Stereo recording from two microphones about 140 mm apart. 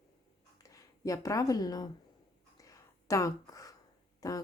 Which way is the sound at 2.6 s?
25° left (ahead or behind).